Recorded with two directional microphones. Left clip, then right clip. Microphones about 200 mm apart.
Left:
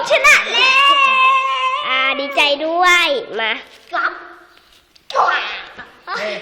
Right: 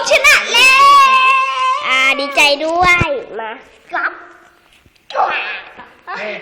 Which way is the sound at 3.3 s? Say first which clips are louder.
Left 5 dB; 35° left (ahead or behind).